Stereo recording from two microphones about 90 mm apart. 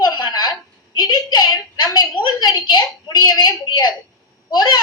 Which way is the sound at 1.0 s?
50° left (ahead or behind).